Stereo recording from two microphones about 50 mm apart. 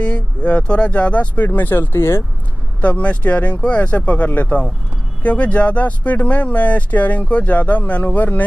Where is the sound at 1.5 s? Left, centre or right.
Left.